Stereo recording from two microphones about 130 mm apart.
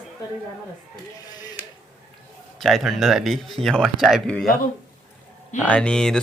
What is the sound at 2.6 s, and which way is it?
Speech, centre (ahead or behind).